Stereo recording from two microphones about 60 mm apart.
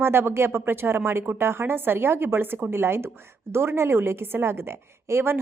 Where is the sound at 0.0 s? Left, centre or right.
Right.